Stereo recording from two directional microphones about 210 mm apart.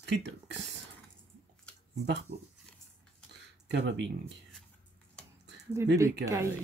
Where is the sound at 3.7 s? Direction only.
55° right (ahead or behind).